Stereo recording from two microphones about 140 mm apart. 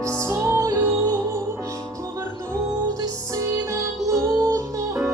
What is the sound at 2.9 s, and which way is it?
Music, 25° right (ahead or behind).